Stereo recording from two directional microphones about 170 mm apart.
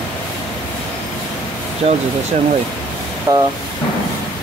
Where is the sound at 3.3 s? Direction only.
20° right (ahead or behind).